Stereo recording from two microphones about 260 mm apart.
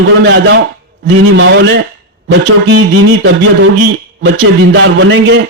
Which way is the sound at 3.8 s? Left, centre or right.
Right.